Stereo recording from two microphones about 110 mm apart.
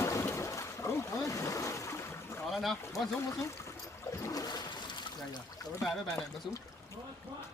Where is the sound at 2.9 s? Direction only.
25° left (ahead or behind).